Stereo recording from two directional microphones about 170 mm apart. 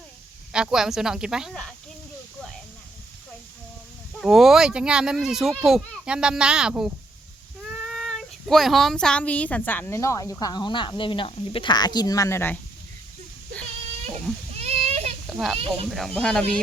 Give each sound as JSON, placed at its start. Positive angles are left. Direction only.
{"t": 0.5, "sound": "a child's voice", "side_deg": -5}
{"t": 4.2, "sound": "a child's voice", "side_deg": 0}
{"t": 14.5, "sound": "a sound", "side_deg": -40}
{"t": 15.3, "sound": "a child's voice", "side_deg": 0}
{"t": 15.5, "sound": "speech", "side_deg": -35}
{"t": 15.9, "sound": "a child's voice", "side_deg": 0}